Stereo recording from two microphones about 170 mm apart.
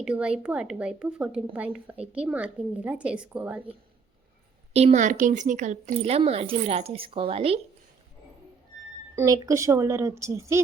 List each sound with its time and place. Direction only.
0.0 s a woman's voice: 5° right (ahead or behind)
4.7 s a woman's voice: 40° right (ahead or behind)
9.1 s a woman's voice: 20° right (ahead or behind)